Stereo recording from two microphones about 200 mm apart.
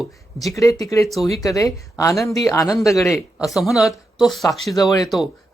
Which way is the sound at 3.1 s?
Centre (ahead or behind).